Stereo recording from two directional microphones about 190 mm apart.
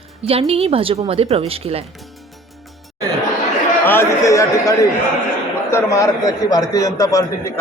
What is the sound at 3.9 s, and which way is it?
A man's voice, 15° left (ahead or behind).